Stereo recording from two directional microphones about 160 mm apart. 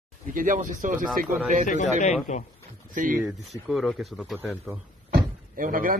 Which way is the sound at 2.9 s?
55° right (ahead or behind).